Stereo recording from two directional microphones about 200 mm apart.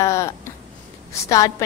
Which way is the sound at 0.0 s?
15° left (ahead or behind).